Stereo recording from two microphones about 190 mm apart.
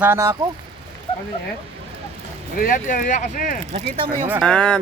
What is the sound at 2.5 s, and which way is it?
Speech, 45° left (ahead or behind).